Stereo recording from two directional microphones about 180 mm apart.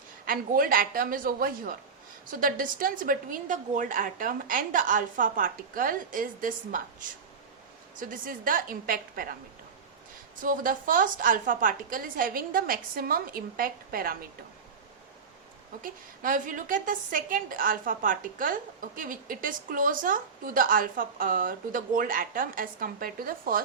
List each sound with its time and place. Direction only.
0.3 s a woman's voice: 50° right (ahead or behind)
10.4 s a woman's voice: 50° right (ahead or behind)
15.8 s a woman's voice: 50° right (ahead or behind)